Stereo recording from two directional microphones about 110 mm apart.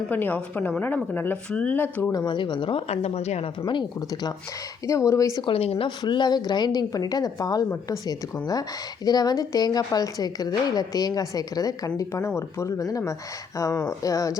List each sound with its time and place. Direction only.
0.1 s speech: 15° left (ahead or behind)
2.1 s speech: 45° left (ahead or behind)
2.9 s speech: 75° left (ahead or behind)
3.7 s speech: 45° left (ahead or behind)
4.9 s speech: 30° left (ahead or behind)
5.5 s a woman's voice: 60° left (ahead or behind)
6.0 s a woman's voice: 40° left (ahead or behind)